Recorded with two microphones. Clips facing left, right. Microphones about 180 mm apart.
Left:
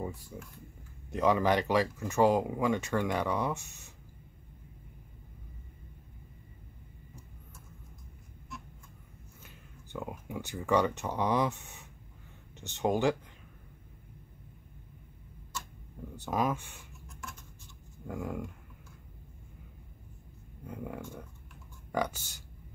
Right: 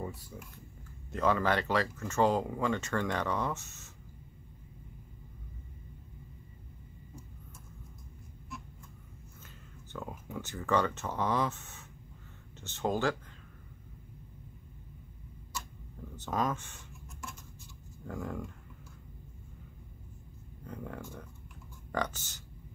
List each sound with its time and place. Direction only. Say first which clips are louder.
0.0 s speech: left 2 dB; 10° left (ahead or behind)
9.9 s speech: left 2 dB; 15° left (ahead or behind)
16.2 s speech: left 2 dB; 10° left (ahead or behind)
18.0 s speech: left 2 dB; 10° left (ahead or behind)
20.6 s speech: left 2 dB; 10° left (ahead or behind)